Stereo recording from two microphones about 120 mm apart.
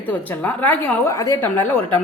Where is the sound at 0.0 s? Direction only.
15° left (ahead or behind).